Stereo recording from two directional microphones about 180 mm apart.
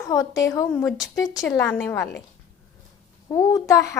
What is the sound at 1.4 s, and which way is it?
Speech, 10° left (ahead or behind).